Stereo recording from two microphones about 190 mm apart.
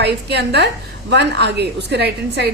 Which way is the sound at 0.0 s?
60° right (ahead or behind).